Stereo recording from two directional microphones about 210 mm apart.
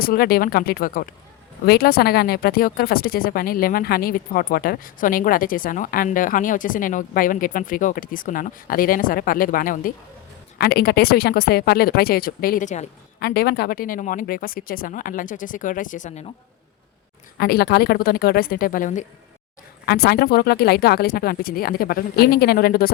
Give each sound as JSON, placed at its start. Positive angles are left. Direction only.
{"t": 0.0, "sound": "speech", "side_deg": 45}
{"t": 17.3, "sound": "speech", "side_deg": 50}
{"t": 19.8, "sound": "speech", "side_deg": 50}